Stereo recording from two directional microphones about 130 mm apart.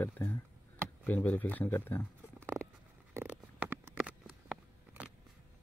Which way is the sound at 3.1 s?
10° right (ahead or behind).